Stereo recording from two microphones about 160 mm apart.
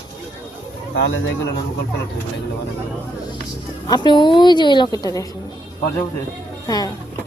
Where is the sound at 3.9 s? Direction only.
30° left (ahead or behind).